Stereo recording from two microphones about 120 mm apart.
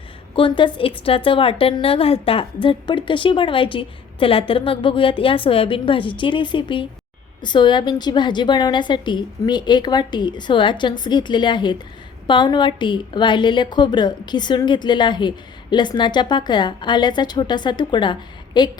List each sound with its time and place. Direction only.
0.3 s a woman's voice: 45° left (ahead or behind)